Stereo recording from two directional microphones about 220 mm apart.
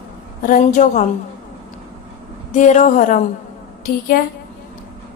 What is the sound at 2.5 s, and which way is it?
Speech, 35° left (ahead or behind).